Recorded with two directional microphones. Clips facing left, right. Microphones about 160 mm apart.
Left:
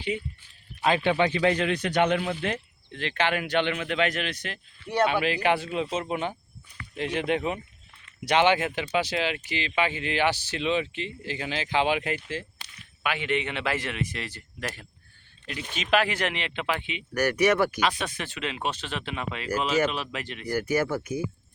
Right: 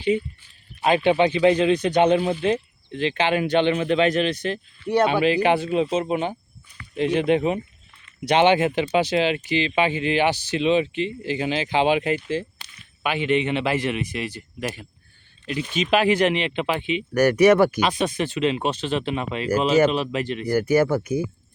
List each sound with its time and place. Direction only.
0.8 s a man's voice: 20° right (ahead or behind)